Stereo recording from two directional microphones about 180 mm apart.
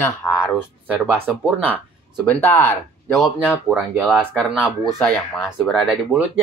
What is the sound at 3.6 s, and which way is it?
Speech, 5° right (ahead or behind).